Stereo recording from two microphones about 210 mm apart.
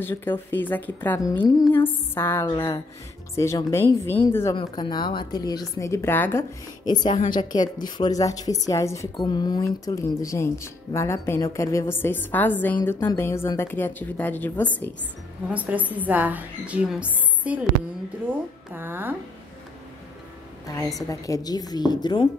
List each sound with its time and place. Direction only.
0.0 s a woman's voice: 10° left (ahead or behind)
15.5 s a woman's voice: 5° right (ahead or behind)
18.7 s a woman's voice: 10° right (ahead or behind)
21.1 s a woman's voice: 15° left (ahead or behind)